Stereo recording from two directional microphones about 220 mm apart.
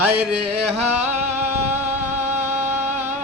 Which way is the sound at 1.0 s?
10° right (ahead or behind).